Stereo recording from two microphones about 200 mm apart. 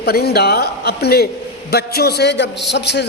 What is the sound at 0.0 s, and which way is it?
A man's voice, 55° left (ahead or behind).